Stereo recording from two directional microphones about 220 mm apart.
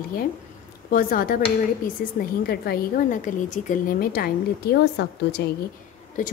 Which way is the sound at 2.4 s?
45° left (ahead or behind).